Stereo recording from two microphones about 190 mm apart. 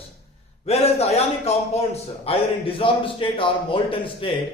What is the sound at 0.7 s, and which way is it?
A man's voice, 35° left (ahead or behind).